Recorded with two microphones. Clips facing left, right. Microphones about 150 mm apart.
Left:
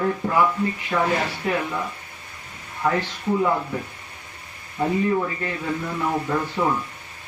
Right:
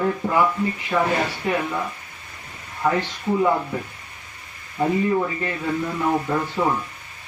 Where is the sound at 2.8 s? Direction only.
10° right (ahead or behind).